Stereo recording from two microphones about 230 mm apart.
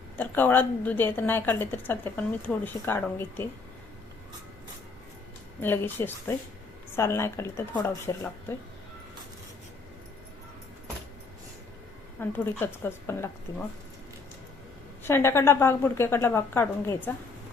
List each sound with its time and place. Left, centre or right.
0.2 s a woman's voice: centre
5.6 s a woman's voice: centre
12.3 s a woman's voice: centre
15.0 s a woman's voice: centre